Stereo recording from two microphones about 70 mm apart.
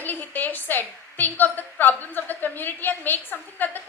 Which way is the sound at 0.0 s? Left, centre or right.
Left.